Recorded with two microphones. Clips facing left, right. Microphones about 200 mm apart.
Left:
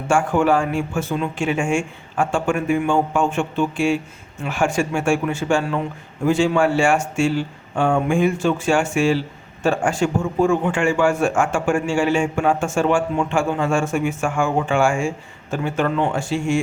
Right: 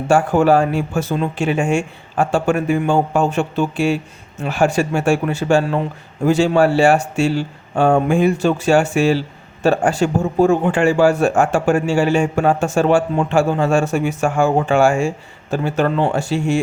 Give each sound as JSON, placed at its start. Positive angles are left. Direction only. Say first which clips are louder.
{"t": 0.1, "sound": "a man's voice", "louder": "right 4 dB", "side_deg": -40}